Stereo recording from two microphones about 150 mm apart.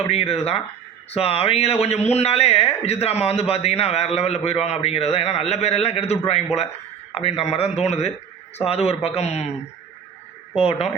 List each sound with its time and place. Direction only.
0.1 s speech: 45° left (ahead or behind)
10.6 s speech: 40° left (ahead or behind)